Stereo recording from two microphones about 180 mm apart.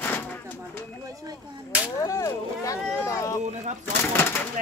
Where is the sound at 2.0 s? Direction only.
20° left (ahead or behind).